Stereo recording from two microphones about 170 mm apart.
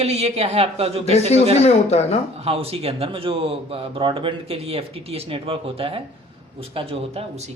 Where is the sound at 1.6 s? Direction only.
40° left (ahead or behind).